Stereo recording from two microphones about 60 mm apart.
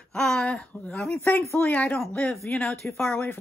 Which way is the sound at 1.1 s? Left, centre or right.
Left.